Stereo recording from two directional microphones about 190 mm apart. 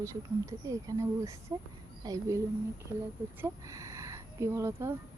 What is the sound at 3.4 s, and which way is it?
Speech, 15° right (ahead or behind).